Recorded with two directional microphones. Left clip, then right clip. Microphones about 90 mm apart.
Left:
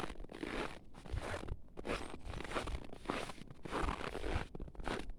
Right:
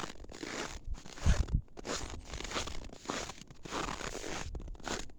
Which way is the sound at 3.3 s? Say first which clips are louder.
Right 2 dB; 30° right (ahead or behind).